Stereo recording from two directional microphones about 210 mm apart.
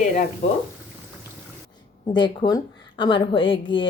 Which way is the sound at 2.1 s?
20° left (ahead or behind).